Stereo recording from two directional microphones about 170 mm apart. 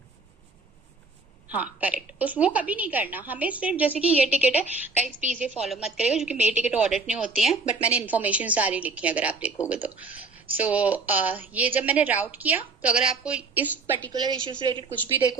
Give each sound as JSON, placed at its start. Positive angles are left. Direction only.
{"t": 1.5, "sound": "a woman's voice", "side_deg": -10}
{"t": 14.1, "sound": "a woman's voice", "side_deg": -25}